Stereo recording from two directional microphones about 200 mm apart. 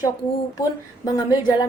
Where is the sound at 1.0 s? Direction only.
20° left (ahead or behind).